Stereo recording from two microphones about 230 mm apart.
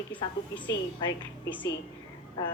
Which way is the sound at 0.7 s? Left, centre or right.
Left.